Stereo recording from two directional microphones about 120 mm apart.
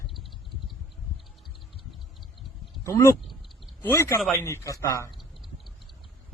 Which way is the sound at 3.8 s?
20° left (ahead or behind).